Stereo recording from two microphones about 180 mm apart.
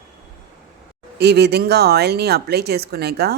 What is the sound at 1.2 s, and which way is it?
Speech, 65° right (ahead or behind).